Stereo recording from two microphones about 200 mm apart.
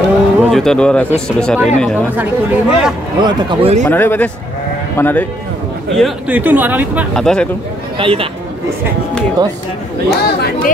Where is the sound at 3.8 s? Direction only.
10° left (ahead or behind).